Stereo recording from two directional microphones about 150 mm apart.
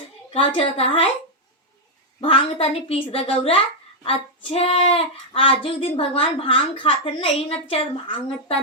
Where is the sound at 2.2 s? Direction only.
40° left (ahead or behind).